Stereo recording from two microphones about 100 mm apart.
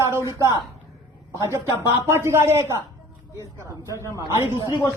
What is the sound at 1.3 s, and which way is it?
A woman's voice, 30° right (ahead or behind).